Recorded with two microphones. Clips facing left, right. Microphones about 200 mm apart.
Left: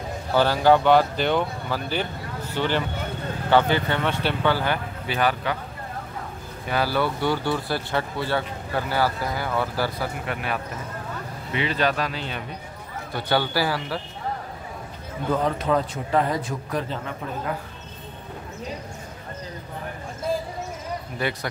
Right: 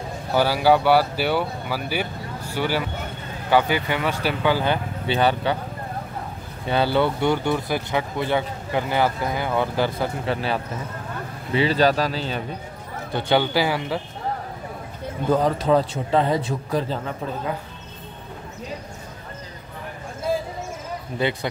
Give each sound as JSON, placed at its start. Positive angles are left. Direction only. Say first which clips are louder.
{"t": 0.3, "sound": "speech", "louder": "even", "side_deg": -10}
{"t": 5.0, "sound": "speech", "louder": "right 4 dB", "side_deg": -25}
{"t": 6.7, "sound": "a man's voice", "louder": "right 4 dB", "side_deg": -25}
{"t": 13.1, "sound": "speech", "louder": "right 3 dB", "side_deg": -20}
{"t": 15.3, "sound": "a man's voice", "louder": "right 4 dB", "side_deg": -35}